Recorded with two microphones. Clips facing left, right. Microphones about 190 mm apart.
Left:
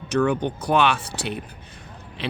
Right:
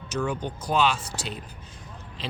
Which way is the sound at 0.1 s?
60° left (ahead or behind).